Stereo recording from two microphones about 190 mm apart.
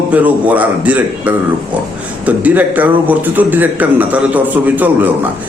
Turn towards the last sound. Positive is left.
turn(degrees=-10)  # may be behind; listen again after turning